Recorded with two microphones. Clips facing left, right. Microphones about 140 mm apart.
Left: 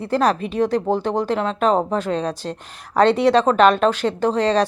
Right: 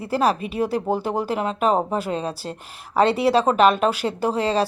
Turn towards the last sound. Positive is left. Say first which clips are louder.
# left 3 dB
turn(degrees=-5)  # may be behind; listen again after turning